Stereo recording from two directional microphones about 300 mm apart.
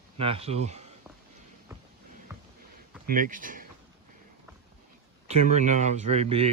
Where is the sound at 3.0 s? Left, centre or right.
Right.